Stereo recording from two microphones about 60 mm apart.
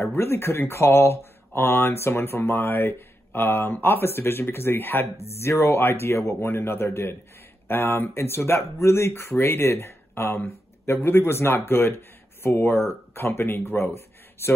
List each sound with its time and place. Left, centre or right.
0.0 s speech: left
5.1 s speech: left